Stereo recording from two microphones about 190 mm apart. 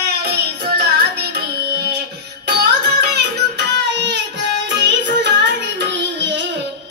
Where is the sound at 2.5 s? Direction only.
60° right (ahead or behind).